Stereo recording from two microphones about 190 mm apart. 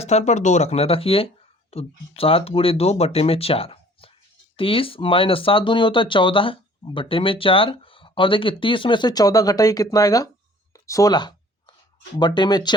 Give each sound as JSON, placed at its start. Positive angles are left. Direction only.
{"t": 0.0, "sound": "speech", "side_deg": 35}
{"t": 10.8, "sound": "a sound", "side_deg": 20}
{"t": 12.2, "sound": "speech", "side_deg": 25}